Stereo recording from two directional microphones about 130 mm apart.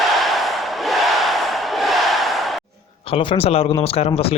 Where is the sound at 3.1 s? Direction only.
45° left (ahead or behind).